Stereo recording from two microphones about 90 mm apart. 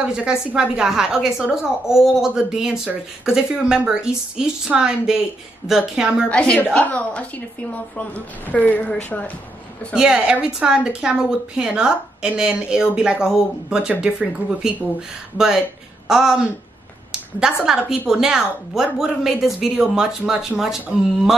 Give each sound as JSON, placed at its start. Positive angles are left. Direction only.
{"t": 0.0, "sound": "a woman's voice", "side_deg": -10}
{"t": 6.2, "sound": "a woman's voice", "side_deg": 15}
{"t": 9.9, "sound": "a woman's voice", "side_deg": -10}
{"t": 17.4, "sound": "a woman's voice", "side_deg": -5}